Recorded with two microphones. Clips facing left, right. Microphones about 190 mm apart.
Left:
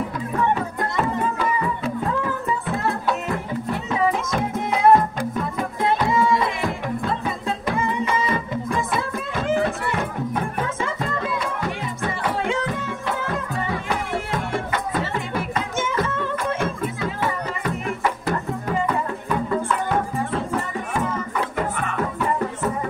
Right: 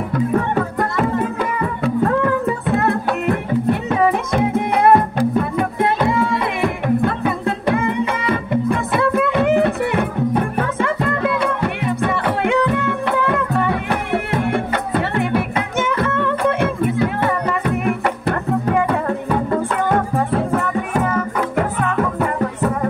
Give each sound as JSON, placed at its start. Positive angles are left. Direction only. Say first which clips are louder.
{"t": 0.1, "sound": "music", "louder": "right 5 dB", "side_deg": -60}